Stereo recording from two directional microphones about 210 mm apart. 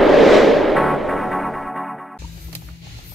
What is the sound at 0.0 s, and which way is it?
Music, centre (ahead or behind).